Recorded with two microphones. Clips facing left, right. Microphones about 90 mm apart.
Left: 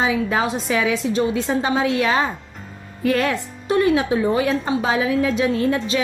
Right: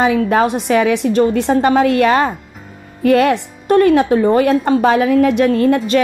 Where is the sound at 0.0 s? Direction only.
60° right (ahead or behind).